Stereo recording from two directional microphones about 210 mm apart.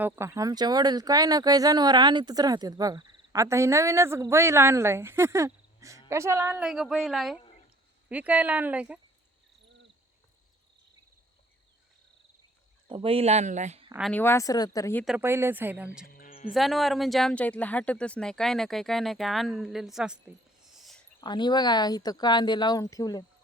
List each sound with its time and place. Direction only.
0.0 s speech: 10° right (ahead or behind)
12.9 s speech: 25° right (ahead or behind)
14.1 s speech: 10° left (ahead or behind)
15.0 s speech: 5° right (ahead or behind)
16.0 s music: 40° left (ahead or behind)
16.5 s speech: centre (ahead or behind)
21.2 s speech: 20° left (ahead or behind)